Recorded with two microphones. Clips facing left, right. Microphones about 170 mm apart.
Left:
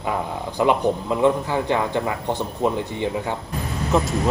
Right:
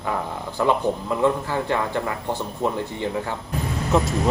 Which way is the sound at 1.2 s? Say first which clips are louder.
Left 2 dB; 20° left (ahead or behind).